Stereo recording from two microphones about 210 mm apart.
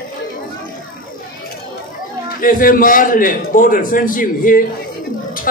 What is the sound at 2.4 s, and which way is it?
A man's voice, 40° left (ahead or behind).